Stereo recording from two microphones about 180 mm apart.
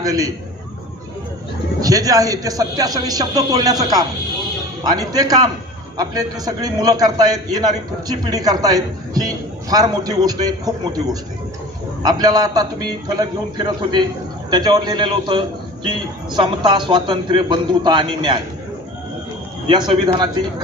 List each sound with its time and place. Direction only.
0.0 s a man's voice: 20° right (ahead or behind)
1.8 s a man's voice: 20° right (ahead or behind)
12.0 s a man's voice: 20° right (ahead or behind)
19.9 s a man's voice: 25° right (ahead or behind)